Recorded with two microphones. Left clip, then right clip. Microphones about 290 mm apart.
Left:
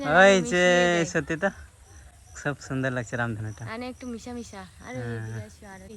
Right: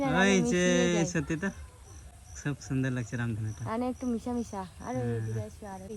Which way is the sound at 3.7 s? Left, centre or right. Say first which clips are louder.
Right 4 dB; centre.